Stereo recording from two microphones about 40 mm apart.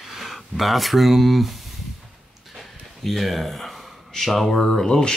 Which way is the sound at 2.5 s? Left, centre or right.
Centre.